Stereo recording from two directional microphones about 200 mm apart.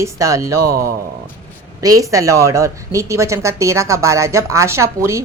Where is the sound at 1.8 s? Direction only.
15° right (ahead or behind).